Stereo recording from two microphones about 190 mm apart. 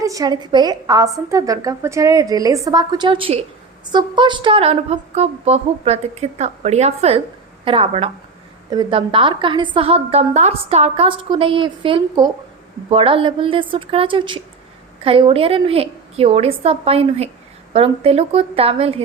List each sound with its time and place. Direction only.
0.0 s a woman's voice: 20° right (ahead or behind)